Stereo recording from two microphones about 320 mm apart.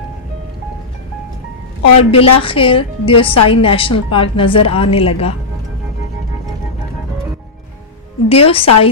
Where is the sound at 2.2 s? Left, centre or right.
Centre.